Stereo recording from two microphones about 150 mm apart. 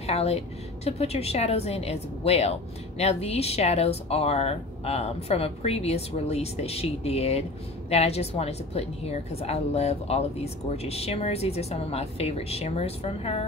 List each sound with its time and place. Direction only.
0.0 s a woman's voice: 45° left (ahead or behind)